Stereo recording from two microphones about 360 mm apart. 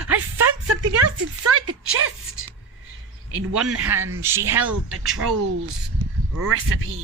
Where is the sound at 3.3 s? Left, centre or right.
Right.